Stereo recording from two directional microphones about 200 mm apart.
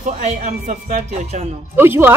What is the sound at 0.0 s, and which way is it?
Speech, 35° right (ahead or behind).